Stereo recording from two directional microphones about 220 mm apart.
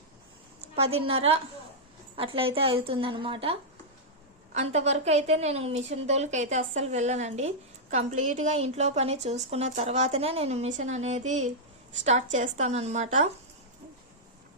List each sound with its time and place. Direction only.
1.0 s a woman's voice: 25° right (ahead or behind)